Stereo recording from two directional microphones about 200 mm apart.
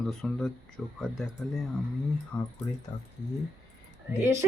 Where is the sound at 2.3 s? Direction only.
20° left (ahead or behind).